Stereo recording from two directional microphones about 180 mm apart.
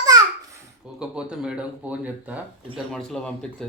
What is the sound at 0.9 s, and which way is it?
Speech, 5° right (ahead or behind).